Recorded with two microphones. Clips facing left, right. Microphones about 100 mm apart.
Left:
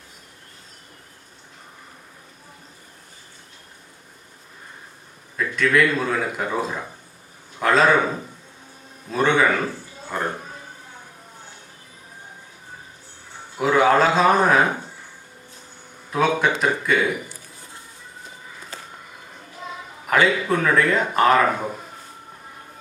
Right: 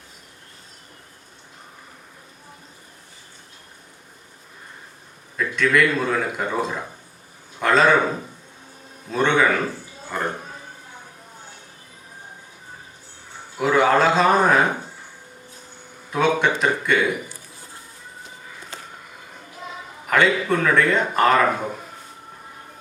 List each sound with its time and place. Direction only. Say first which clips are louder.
5.4 s a man's voice: even; centre (ahead or behind)
13.6 s speech: left 1 dB; centre (ahead or behind)
16.0 s speech: even; centre (ahead or behind)
20.1 s speech: even; 5° left (ahead or behind)